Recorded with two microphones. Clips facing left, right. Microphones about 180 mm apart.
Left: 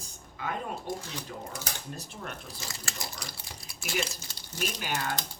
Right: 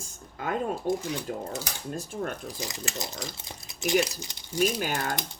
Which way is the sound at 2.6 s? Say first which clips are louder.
Right 6 dB; 15° right (ahead or behind).